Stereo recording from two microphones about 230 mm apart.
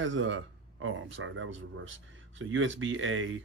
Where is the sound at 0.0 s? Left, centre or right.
Right.